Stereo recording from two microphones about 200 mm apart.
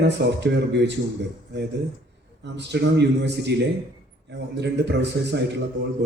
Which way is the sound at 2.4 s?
60° right (ahead or behind).